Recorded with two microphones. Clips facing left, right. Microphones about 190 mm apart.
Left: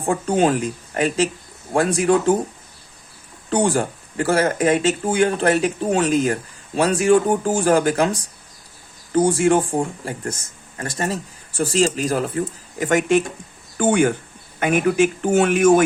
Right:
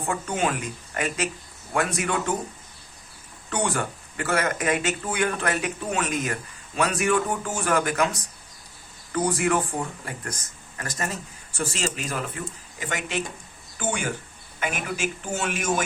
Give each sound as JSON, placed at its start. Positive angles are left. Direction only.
{"t": 0.0, "sound": "speech", "side_deg": 30}
{"t": 3.5, "sound": "speech", "side_deg": 30}
{"t": 12.8, "sound": "speech", "side_deg": 50}